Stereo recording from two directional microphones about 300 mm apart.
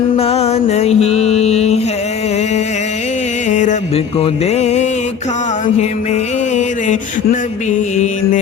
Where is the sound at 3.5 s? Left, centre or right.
Left.